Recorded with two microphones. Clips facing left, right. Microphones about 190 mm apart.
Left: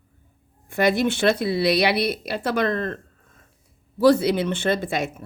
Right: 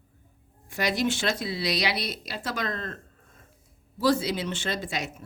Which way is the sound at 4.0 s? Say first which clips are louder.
Left 8 dB; 60° left (ahead or behind).